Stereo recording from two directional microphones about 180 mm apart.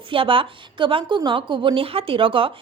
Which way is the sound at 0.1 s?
30° right (ahead or behind).